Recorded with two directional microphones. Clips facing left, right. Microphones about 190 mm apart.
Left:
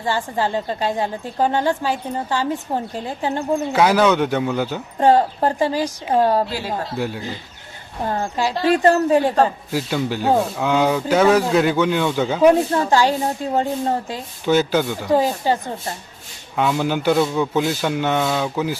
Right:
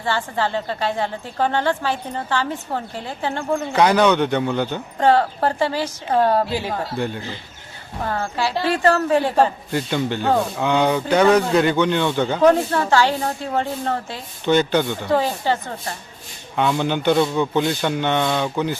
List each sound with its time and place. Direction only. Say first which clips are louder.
0.0 s speech: left 1 dB; 15° left (ahead or behind)
3.7 s speech: even; 5° left (ahead or behind)
8.0 s speech: left 2 dB; 20° left (ahead or behind)
9.7 s speech: right 1 dB; 5° left (ahead or behind)
14.4 s speech: even; 5° left (ahead or behind)
16.6 s speech: even; 5° left (ahead or behind)